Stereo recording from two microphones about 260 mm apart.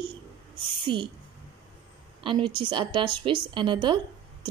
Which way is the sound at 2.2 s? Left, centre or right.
Centre.